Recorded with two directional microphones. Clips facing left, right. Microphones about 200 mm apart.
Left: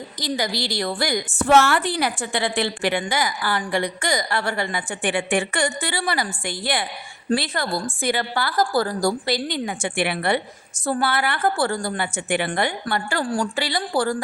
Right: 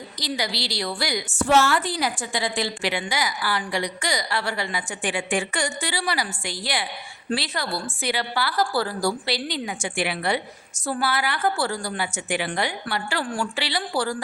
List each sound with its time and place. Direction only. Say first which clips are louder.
0.2 s a woman's voice: left 3 dB; 50° left (ahead or behind)